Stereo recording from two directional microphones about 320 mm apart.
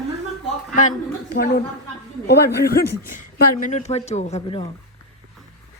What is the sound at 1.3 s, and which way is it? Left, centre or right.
A woman's voice, left.